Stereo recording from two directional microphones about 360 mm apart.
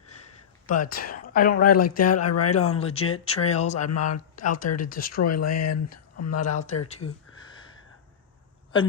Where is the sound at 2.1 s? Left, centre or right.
Left.